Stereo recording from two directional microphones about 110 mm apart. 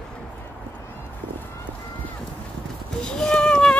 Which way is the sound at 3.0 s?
5° left (ahead or behind).